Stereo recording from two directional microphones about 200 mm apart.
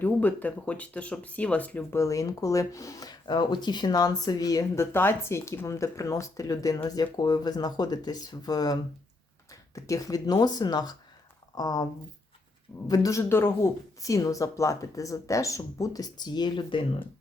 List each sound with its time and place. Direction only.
0.0 s speech: 10° left (ahead or behind)
12.9 s speech: 15° left (ahead or behind)